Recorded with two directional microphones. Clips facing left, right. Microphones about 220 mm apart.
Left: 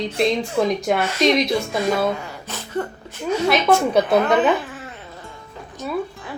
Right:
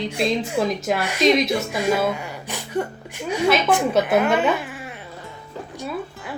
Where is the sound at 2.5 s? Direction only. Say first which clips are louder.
Right 1 dB; 15° right (ahead or behind).